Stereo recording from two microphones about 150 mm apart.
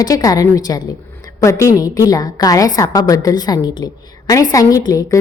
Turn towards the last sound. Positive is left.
turn(degrees=25)  # may be behind; listen again after turning